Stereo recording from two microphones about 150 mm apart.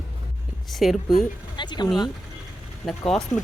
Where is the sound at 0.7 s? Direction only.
Centre (ahead or behind).